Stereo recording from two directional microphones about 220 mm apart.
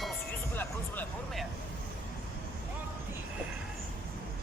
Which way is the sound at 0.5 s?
10° left (ahead or behind).